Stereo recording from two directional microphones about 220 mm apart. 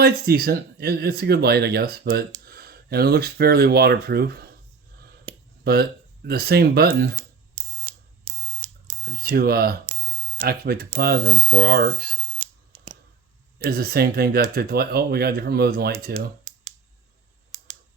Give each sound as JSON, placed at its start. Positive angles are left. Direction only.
{"t": 0.0, "sound": "speech", "side_deg": -45}
{"t": 5.6, "sound": "speech", "side_deg": -45}
{"t": 7.5, "sound": "a sound", "side_deg": -20}
{"t": 9.0, "sound": "speech", "side_deg": -40}
{"t": 13.7, "sound": "speech", "side_deg": -45}